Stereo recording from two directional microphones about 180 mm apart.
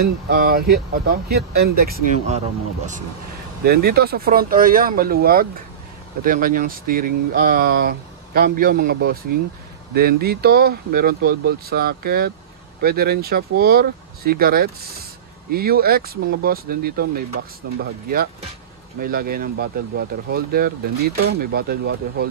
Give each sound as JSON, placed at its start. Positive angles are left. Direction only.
{"t": 0.0, "sound": "speech", "side_deg": -55}
{"t": 3.6, "sound": "speech", "side_deg": -60}